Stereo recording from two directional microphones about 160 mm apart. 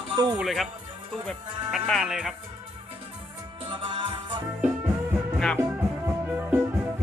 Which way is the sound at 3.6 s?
30° right (ahead or behind).